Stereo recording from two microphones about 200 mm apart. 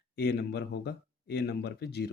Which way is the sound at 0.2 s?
55° left (ahead or behind).